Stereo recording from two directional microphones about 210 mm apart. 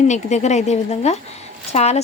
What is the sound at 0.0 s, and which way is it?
A woman's voice, 35° left (ahead or behind).